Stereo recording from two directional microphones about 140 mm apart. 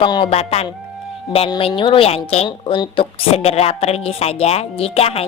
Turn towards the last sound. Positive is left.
turn(degrees=45)  # may be behind; listen again after turning